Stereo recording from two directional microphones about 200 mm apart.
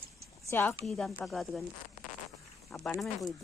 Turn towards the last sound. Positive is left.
turn(degrees=0)  # may be behind; listen again after turning